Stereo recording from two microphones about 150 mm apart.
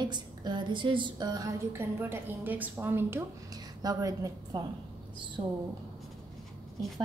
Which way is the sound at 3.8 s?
25° right (ahead or behind).